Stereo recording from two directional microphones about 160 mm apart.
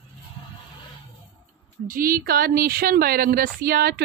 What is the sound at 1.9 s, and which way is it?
Speech, 60° right (ahead or behind).